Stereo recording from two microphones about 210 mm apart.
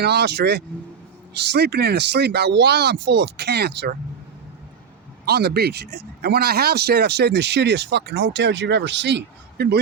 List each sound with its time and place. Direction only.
0.0 s speech: 50° right (ahead or behind)
5.2 s speech: 50° right (ahead or behind)